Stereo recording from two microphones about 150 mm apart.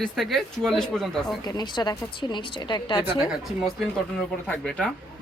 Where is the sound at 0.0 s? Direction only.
Centre (ahead or behind).